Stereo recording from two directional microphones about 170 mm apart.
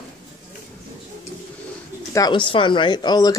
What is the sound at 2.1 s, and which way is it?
Speech, 25° left (ahead or behind).